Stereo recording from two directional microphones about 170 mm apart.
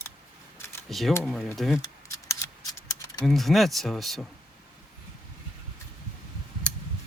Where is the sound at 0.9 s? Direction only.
Centre (ahead or behind).